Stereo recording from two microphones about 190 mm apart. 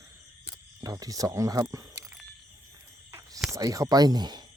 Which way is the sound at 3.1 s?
15° right (ahead or behind).